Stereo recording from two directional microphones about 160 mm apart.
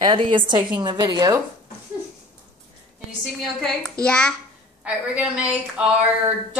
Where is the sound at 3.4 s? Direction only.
5° left (ahead or behind).